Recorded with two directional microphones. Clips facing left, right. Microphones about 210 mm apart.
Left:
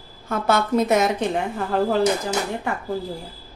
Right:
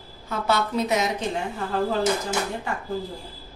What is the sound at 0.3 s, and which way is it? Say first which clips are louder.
A woman's voice: left 4 dB; 50° left (ahead or behind).